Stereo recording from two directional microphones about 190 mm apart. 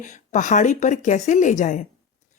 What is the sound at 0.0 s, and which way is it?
Speech, 40° left (ahead or behind).